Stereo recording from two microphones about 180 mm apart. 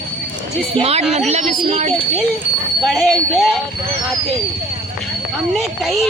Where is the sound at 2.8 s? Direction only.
Centre (ahead or behind).